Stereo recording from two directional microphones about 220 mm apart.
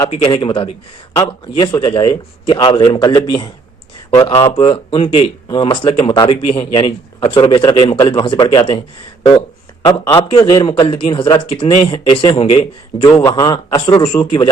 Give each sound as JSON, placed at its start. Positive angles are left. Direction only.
{"t": 0.1, "sound": "a man's voice", "side_deg": 25}
{"t": 9.9, "sound": "a man's voice", "side_deg": 15}